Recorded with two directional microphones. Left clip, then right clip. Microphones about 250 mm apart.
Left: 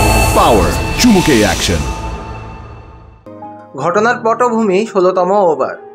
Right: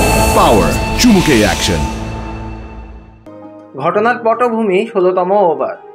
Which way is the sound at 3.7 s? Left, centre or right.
Left.